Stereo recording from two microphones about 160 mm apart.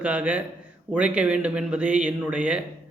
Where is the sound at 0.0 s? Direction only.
10° right (ahead or behind).